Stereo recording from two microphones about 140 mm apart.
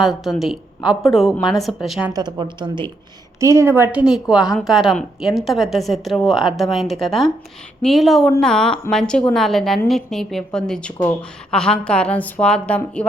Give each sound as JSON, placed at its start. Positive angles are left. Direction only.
{"t": 0.0, "sound": "a woman's voice", "side_deg": 0}
{"t": 2.1, "sound": "a woman's voice", "side_deg": -30}
{"t": 3.4, "sound": "a woman's voice", "side_deg": -20}
{"t": 4.0, "sound": "a woman's voice", "side_deg": -5}